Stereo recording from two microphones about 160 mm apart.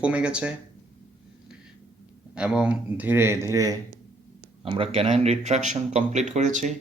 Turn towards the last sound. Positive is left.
turn(degrees=-50)  # may be behind; listen again after turning